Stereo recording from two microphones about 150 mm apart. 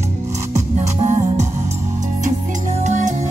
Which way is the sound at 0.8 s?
50° right (ahead or behind).